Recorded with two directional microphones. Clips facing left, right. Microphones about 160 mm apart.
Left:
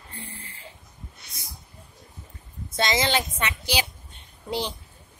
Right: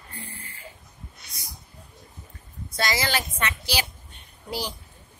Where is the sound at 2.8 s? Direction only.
20° left (ahead or behind).